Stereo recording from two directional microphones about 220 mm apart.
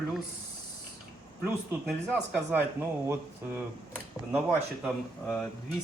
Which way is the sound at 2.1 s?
5° right (ahead or behind).